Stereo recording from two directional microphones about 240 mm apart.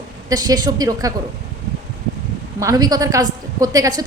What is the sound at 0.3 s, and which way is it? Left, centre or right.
Speech, centre.